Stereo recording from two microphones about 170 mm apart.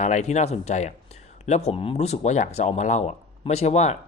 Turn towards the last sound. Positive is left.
turn(degrees=40)  # may be behind; listen again after turning